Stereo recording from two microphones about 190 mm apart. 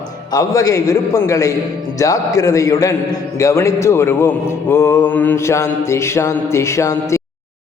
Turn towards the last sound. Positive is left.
turn(degrees=15)  # may be behind; listen again after turning